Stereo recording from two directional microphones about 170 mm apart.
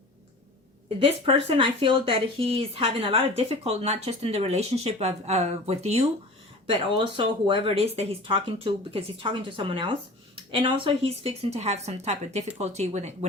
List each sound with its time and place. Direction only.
1.2 s speech: 35° right (ahead or behind)